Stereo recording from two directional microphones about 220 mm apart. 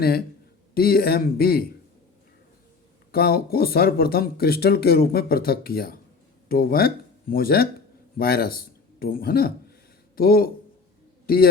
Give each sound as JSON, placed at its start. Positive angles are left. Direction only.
{"t": 0.7, "sound": "speech", "side_deg": 45}
{"t": 3.1, "sound": "speech", "side_deg": 45}